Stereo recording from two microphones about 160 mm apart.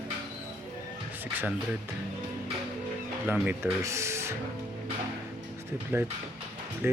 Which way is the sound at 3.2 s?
10° right (ahead or behind).